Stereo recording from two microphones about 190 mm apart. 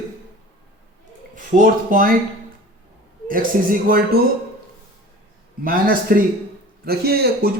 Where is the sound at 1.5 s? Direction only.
45° right (ahead or behind).